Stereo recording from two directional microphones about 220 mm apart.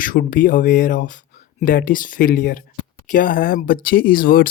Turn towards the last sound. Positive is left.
turn(degrees=40)  # may be behind; listen again after turning